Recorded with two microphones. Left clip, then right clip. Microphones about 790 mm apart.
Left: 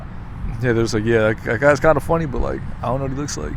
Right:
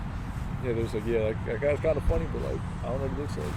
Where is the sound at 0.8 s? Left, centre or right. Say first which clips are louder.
Left 11 dB; left.